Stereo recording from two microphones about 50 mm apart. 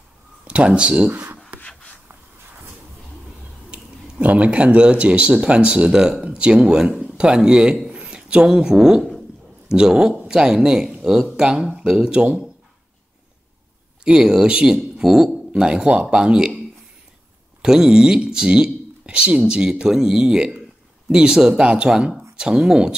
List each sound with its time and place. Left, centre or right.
0.5 s speech: right
1.6 s a sound: left
3.7 s speech: right; by 11.2 s centre
11.2 s speech: centre
14.0 s a woman's voice: centre
17.6 s speech: centre